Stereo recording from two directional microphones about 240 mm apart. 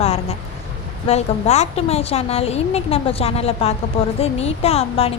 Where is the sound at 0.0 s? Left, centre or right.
Left.